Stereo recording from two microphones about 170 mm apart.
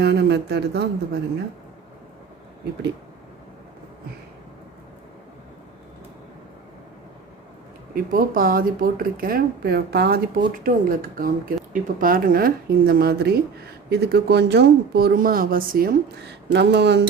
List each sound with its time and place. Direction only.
0.0 s speech: 80° right
7.9 s speech: 60° right (ahead or behind)
10.6 s speech: 55° right (ahead or behind); by 17.1 s 85° right